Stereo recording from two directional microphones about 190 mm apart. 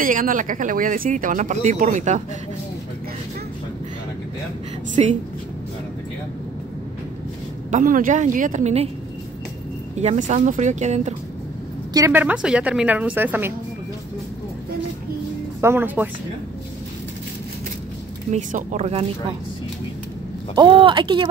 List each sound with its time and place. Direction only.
0.0 s speech: 45° right (ahead or behind)
5.0 s speech: 35° right (ahead or behind)
7.7 s speech: 45° right (ahead or behind)
9.9 s speech: 40° right (ahead or behind)
11.9 s a woman's voice: 15° right (ahead or behind)
15.6 s a woman's voice: 10° right (ahead or behind)
18.3 s speech: 40° right (ahead or behind)
20.5 s speech: 25° right (ahead or behind)